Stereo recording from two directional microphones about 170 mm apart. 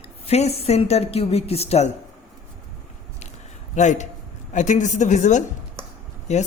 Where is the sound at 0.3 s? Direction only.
35° left (ahead or behind).